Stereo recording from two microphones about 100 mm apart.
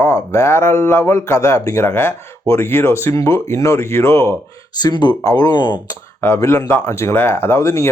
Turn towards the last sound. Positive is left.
turn(degrees=30)  # may be behind; listen again after turning